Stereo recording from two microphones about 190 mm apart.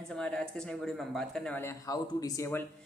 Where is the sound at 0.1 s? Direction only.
5° left (ahead or behind).